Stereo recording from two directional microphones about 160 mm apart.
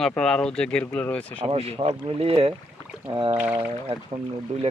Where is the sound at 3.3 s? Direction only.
10° right (ahead or behind).